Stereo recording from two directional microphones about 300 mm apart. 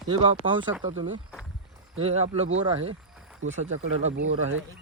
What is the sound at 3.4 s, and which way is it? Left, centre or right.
Speech, right.